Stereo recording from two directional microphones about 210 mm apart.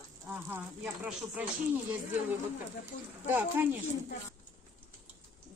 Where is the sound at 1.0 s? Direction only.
5° right (ahead or behind).